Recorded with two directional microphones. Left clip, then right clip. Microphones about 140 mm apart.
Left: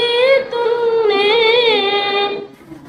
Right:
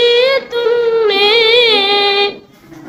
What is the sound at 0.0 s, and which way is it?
Music, 35° right (ahead or behind).